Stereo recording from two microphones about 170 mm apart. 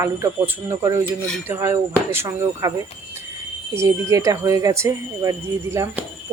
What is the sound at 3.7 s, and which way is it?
Speech, 15° right (ahead or behind).